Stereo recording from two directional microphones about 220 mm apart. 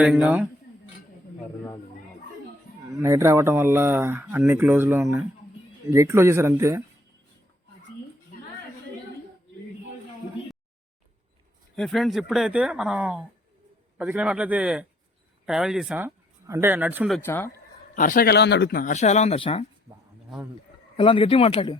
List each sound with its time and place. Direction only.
0.0 s speech: 5° right (ahead or behind)
2.9 s speech: 15° right (ahead or behind)
11.8 s speech: centre (ahead or behind)
17.2 s speech: 10° left (ahead or behind)
17.9 s speech: 35° left (ahead or behind)
20.9 s speech: 25° left (ahead or behind)